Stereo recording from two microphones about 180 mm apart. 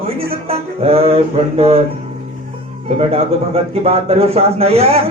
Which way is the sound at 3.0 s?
35° right (ahead or behind).